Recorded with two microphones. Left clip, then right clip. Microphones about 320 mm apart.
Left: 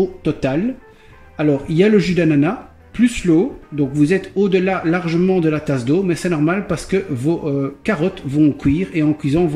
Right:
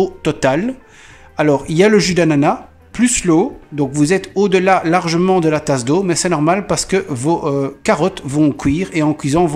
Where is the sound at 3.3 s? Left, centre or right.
Right.